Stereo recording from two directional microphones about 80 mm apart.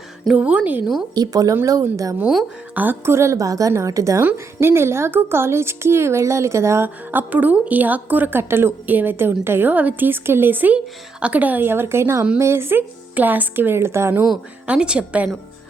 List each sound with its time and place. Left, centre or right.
0.3 s a woman's voice: centre
1.1 s speech: right
2.7 s a woman's voice: right
4.2 s a woman's voice: right
6.8 s a woman's voice: right
14.7 s a woman's voice: centre